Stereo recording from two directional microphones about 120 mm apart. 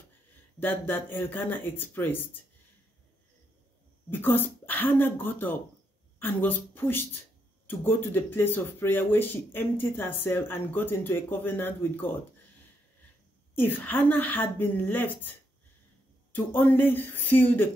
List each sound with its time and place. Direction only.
0.6 s speech: 15° left (ahead or behind)
4.1 s speech: 15° left (ahead or behind)
13.7 s speech: 15° left (ahead or behind)